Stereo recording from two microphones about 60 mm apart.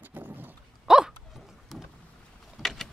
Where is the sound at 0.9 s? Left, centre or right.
Centre.